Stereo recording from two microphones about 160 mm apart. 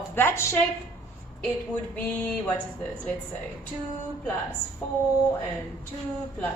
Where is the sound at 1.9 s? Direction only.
10° left (ahead or behind).